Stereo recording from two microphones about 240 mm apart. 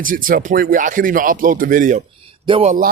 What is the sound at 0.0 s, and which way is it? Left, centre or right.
Speech, right.